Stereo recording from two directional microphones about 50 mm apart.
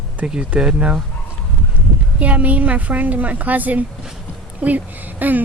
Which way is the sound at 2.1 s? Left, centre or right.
Right.